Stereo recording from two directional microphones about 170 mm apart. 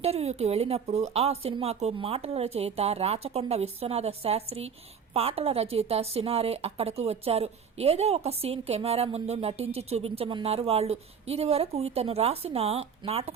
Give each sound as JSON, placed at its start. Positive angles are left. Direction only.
{"t": 0.0, "sound": "speech", "side_deg": -35}